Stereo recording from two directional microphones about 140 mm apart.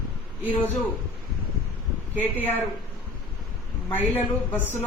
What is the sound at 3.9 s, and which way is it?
Speech, 10° left (ahead or behind).